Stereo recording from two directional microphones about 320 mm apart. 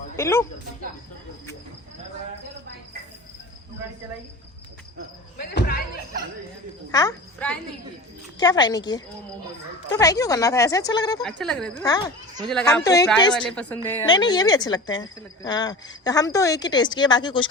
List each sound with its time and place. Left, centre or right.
0.2 s a woman's voice: centre
5.4 s speech: left
6.9 s a woman's voice: centre